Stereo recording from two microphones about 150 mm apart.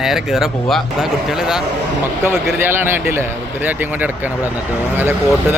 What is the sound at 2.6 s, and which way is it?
Speech, 15° right (ahead or behind).